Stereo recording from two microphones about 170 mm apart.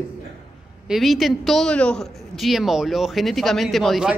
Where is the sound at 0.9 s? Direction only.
Centre (ahead or behind).